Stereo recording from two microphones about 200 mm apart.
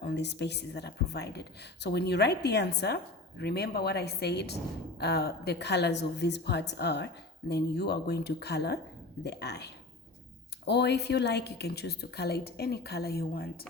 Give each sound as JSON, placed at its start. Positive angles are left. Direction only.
{"t": 0.0, "sound": "a woman's voice", "side_deg": 60}